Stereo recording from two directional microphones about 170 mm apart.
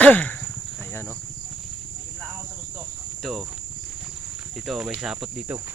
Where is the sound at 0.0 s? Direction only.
10° left (ahead or behind).